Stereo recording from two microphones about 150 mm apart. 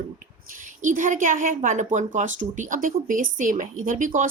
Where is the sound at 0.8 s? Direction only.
60° right (ahead or behind).